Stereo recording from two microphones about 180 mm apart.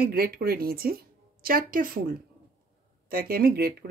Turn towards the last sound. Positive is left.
turn(degrees=-60)  # may be behind; listen again after turning